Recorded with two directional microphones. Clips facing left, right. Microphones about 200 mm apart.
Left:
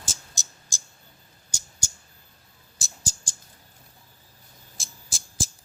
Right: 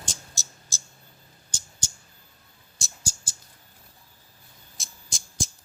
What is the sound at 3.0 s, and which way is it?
Mouse, 10° right (ahead or behind).